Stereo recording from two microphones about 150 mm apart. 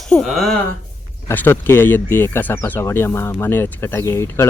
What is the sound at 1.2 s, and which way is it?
Speech, 15° left (ahead or behind).